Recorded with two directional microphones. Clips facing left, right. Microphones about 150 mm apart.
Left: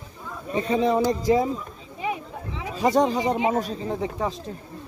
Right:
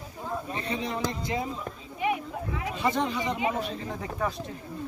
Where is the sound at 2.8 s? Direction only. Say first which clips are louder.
Left 8 dB; 40° left (ahead or behind).